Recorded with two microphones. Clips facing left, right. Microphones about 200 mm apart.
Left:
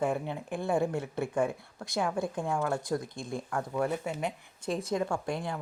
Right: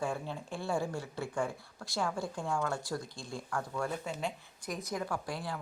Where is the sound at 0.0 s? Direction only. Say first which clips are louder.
Left 5 dB; 20° left (ahead or behind).